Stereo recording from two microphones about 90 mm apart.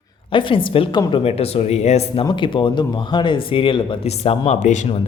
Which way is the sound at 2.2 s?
60° left (ahead or behind).